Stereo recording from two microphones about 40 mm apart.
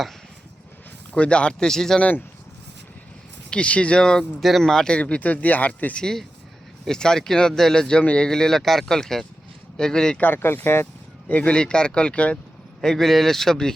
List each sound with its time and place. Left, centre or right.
1.1 s speech: left
1.6 s speech: centre
3.5 s speech: left
4.0 s speech: centre
4.4 s speech: centre
4.6 s speech: centre
4.9 s speech: left
5.2 s speech: left
6.0 s speech: centre
8.3 s speech: centre
10.3 s speech: left
11.3 s speech: left
11.5 s speech: left
12.8 s speech: centre